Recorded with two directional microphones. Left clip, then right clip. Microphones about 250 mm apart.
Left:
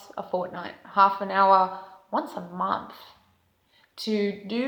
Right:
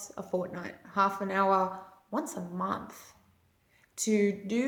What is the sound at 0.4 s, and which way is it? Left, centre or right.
A woman's voice, right.